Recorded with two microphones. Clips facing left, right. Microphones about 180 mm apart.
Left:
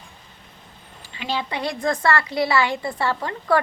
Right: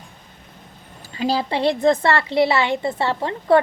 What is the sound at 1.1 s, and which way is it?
A woman's voice, 35° right (ahead or behind).